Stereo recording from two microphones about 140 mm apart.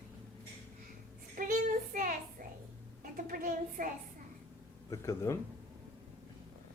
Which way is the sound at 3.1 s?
90° right.